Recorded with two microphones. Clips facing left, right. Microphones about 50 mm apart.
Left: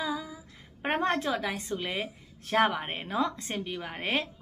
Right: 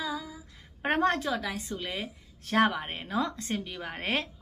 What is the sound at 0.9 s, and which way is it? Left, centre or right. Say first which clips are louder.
A woman's voice: right 1 dB; centre.